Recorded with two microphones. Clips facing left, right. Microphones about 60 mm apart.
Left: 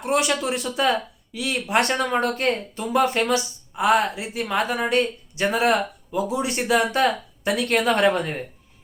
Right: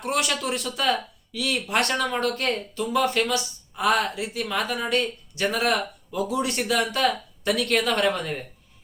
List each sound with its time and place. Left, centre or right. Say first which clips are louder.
0.0 s speech: left 4 dB; centre